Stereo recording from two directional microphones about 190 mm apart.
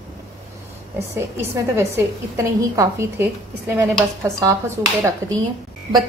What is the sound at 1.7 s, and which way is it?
A woman's voice, 15° right (ahead or behind).